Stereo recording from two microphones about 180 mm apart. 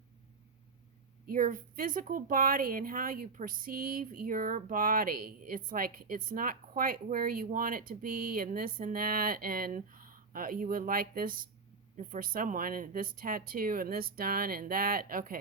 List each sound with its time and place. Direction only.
1.3 s a woman's voice: 50° right (ahead or behind)